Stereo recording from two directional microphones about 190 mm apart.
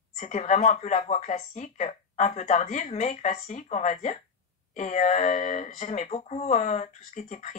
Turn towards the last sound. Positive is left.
turn(degrees=40)  # may be behind; listen again after turning